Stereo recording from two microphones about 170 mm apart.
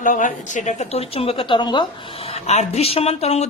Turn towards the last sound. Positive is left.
turn(degrees=40)  # may be behind; listen again after turning